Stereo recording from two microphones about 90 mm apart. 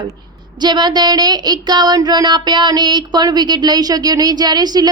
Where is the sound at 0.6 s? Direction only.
55° right (ahead or behind).